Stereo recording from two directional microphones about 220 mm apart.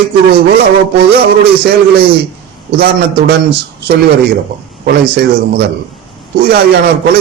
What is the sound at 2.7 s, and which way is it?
Speech, 45° right (ahead or behind).